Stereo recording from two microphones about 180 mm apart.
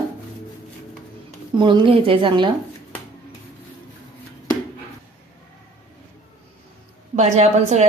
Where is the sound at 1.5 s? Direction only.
25° right (ahead or behind).